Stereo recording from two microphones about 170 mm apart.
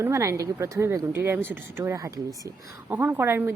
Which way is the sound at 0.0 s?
20° right (ahead or behind).